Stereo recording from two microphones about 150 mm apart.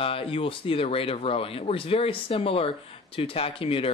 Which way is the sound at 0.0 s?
35° left (ahead or behind).